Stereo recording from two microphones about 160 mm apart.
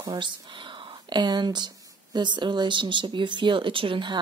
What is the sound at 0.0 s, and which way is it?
Speech, 30° right (ahead or behind).